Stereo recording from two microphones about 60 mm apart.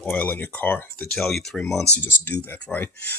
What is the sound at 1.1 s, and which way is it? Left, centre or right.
Speech, centre.